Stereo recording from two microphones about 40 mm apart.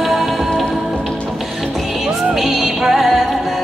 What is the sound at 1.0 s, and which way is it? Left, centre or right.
Music, left.